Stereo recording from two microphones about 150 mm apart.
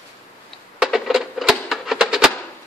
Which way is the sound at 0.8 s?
Centre (ahead or behind).